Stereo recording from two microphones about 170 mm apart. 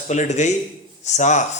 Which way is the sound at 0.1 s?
45° left (ahead or behind).